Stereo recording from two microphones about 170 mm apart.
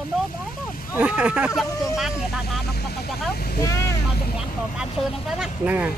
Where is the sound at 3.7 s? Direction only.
20° left (ahead or behind).